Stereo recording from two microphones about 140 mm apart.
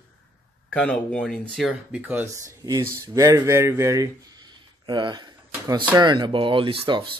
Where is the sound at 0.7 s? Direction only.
5° left (ahead or behind).